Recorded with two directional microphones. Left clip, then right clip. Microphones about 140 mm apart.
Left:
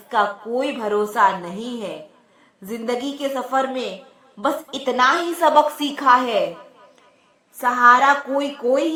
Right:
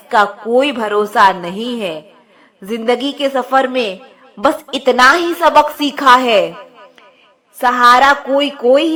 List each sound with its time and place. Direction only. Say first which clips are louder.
0.1 s a woman's voice: right 8 dB; 40° right (ahead or behind)
7.6 s a woman's voice: right 5 dB; 45° right (ahead or behind)
8.3 s a woman's voice: right 9 dB; 30° right (ahead or behind)